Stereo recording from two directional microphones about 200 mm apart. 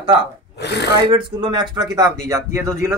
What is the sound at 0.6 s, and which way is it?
Speech, 55° left (ahead or behind).